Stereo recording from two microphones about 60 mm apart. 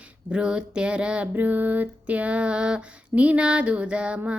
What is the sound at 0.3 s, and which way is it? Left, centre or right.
Female singing, centre.